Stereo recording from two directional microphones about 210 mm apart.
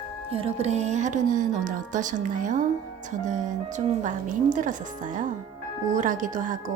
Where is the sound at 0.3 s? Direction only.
25° right (ahead or behind).